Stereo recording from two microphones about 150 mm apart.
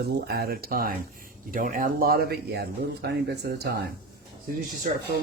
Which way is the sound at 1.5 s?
65° right (ahead or behind).